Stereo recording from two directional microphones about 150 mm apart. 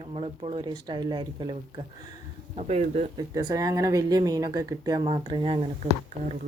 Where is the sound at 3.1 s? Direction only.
30° right (ahead or behind).